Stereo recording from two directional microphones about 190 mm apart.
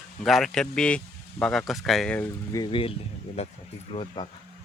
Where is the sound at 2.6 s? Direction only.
25° left (ahead or behind).